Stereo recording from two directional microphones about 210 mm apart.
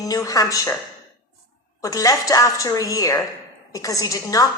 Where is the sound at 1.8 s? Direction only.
15° left (ahead or behind).